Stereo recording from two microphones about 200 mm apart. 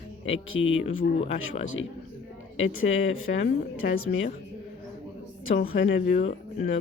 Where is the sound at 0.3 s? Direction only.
75° left (ahead or behind).